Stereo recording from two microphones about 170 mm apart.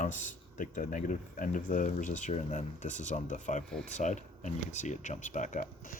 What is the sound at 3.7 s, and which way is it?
Speech, 5° left (ahead or behind).